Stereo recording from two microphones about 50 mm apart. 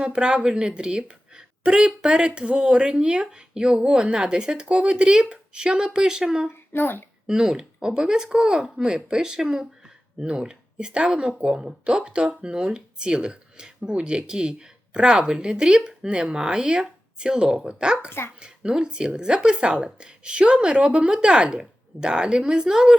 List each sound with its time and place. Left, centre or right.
0.0 s a woman's voice: centre
6.5 s speech: left
7.3 s a woman's voice: centre